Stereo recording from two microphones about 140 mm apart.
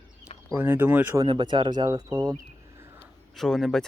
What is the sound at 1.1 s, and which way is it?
Speech, 30° right (ahead or behind).